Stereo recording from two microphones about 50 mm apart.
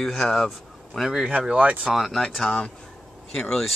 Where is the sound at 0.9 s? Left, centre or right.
Centre.